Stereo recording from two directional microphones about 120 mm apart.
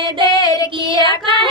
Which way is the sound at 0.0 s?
45° right (ahead or behind).